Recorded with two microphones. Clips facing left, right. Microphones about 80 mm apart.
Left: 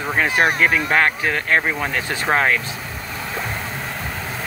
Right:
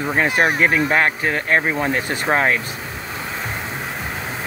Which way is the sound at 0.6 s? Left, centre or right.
Right.